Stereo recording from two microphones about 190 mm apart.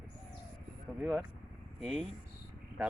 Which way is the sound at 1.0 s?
5° right (ahead or behind).